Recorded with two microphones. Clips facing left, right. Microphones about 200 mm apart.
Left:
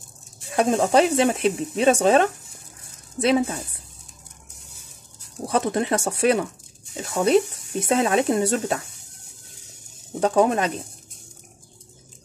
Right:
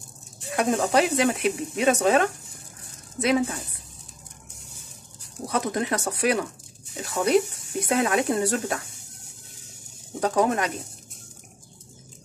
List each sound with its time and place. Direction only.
0.6 s speech: 30° left (ahead or behind)
5.5 s speech: 30° left (ahead or behind)
10.2 s speech: 25° left (ahead or behind)